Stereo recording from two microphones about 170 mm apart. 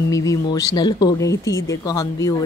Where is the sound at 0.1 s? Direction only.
20° left (ahead or behind).